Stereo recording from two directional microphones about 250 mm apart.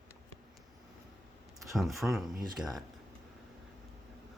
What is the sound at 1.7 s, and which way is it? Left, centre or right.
Speech, centre.